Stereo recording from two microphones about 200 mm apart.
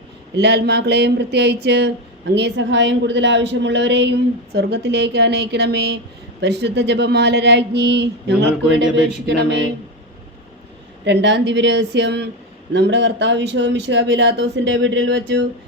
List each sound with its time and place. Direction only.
0.3 s speech: 55° right (ahead or behind)
11.0 s speech: 60° right (ahead or behind)